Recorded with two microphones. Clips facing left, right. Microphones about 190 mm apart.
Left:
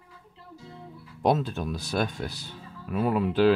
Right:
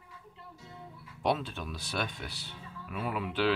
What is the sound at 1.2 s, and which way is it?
Speech, 40° left (ahead or behind).